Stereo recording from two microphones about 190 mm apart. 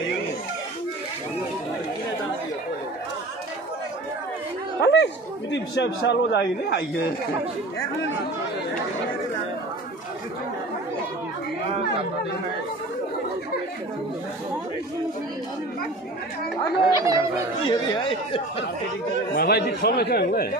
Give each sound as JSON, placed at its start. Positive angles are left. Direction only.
{"t": 4.8, "sound": "a man's voice", "side_deg": 65}
{"t": 16.9, "sound": "speech", "side_deg": -15}
{"t": 17.6, "sound": "speech", "side_deg": 25}
{"t": 19.3, "sound": "speech", "side_deg": 55}